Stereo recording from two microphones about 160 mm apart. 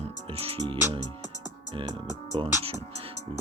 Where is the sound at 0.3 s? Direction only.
35° right (ahead or behind).